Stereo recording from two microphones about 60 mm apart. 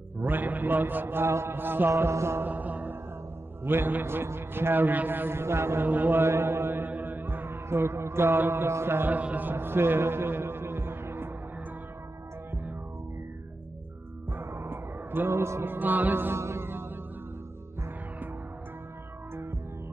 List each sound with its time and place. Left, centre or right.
0.2 s a man's voice: right
1.9 s music: right
2.4 s music: right
3.6 s a man's voice: right
5.9 s music: right
9.1 s a man's voice: right
14.4 s police car: right
15.7 s a man's voice: right
16.3 s music: right